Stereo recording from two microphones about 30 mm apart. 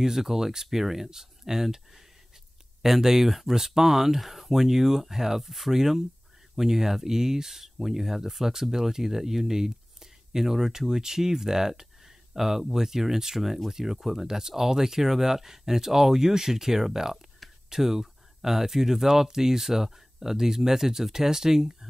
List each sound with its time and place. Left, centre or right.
0.0 s speech: centre
2.8 s speech: centre